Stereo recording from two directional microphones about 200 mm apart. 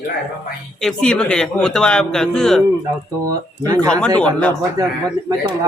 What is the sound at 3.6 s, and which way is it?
Speech, 15° right (ahead or behind).